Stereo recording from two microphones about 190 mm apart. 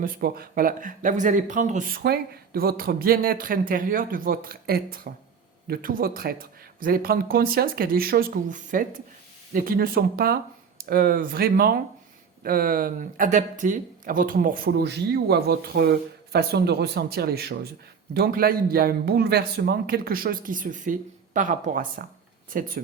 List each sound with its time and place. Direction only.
0.0 s speech: 50° right (ahead or behind)
2.0 s speech: 55° right (ahead or behind)